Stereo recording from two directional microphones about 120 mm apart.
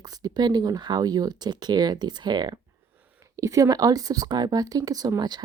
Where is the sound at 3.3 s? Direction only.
25° right (ahead or behind).